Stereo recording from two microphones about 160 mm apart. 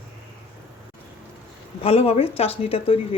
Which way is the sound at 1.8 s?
40° left (ahead or behind).